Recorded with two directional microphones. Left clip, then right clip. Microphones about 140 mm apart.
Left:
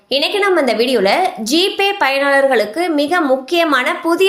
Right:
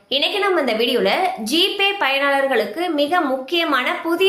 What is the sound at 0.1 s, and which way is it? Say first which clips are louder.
A woman's voice: left 4 dB; 45° left (ahead or behind).